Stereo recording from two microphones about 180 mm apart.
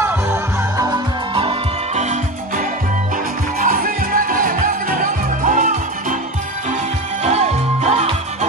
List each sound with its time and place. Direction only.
0.0 s music: 15° right (ahead or behind); by 2.6 s 40° right (ahead or behind)
3.5 s music: 50° right (ahead or behind)
7.2 s music: 40° right (ahead or behind)